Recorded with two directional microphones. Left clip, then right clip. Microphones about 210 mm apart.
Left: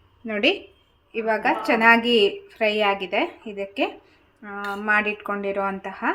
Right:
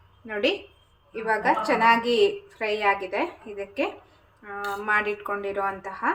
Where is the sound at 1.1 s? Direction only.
40° left (ahead or behind).